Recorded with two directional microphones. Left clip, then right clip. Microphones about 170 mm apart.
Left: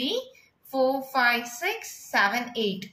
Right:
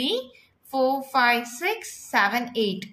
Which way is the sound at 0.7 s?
35° right (ahead or behind).